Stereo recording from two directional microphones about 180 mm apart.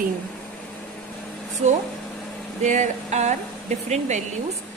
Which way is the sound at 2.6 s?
40° right (ahead or behind).